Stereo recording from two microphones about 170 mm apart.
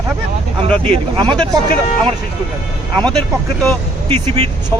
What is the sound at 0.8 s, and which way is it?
Speech, 35° right (ahead or behind).